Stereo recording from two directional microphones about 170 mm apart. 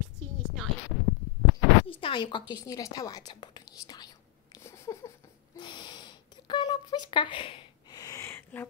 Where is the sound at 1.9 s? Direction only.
30° left (ahead or behind).